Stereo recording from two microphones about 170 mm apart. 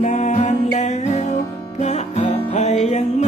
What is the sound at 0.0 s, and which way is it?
Music, 45° left (ahead or behind).